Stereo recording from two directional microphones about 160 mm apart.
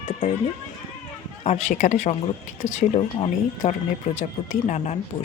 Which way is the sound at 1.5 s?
50° left (ahead or behind).